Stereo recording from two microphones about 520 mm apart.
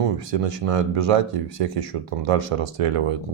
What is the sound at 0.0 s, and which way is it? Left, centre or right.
Speech, right.